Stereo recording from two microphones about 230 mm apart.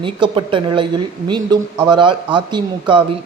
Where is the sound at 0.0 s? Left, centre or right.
Right.